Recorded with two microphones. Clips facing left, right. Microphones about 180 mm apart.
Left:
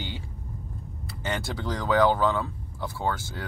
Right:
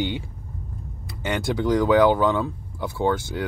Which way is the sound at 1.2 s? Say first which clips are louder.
Right 7 dB; 15° right (ahead or behind).